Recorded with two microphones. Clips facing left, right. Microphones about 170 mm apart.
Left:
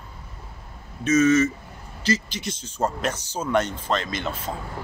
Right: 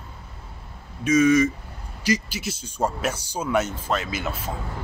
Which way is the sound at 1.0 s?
10° right (ahead or behind).